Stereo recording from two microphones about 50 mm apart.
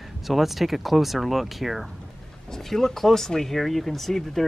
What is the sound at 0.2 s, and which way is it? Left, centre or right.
Speech, centre.